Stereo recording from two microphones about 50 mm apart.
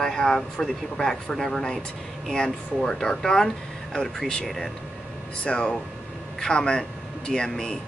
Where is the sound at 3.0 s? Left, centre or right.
Centre.